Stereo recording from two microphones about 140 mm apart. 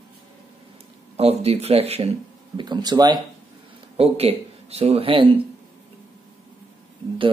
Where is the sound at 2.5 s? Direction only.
30° right (ahead or behind).